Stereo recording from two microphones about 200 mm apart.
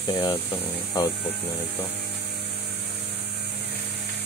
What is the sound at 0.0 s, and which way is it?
Speech, 25° left (ahead or behind).